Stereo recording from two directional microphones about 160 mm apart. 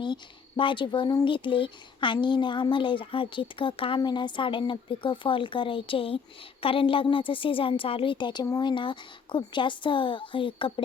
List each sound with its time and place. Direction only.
0.0 s speech: 30° left (ahead or behind)